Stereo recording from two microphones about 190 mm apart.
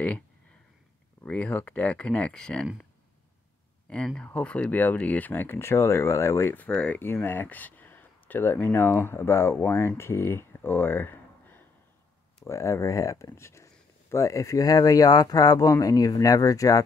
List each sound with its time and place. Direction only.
1.2 s speech: 10° left (ahead or behind)
3.9 s speech: 5° left (ahead or behind)